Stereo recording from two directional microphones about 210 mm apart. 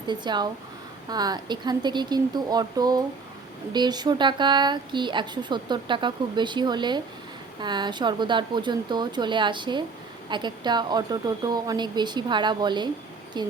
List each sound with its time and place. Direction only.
0.1 s speech: 20° right (ahead or behind)